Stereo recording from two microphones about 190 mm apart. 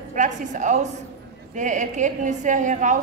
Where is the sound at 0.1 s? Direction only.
40° right (ahead or behind).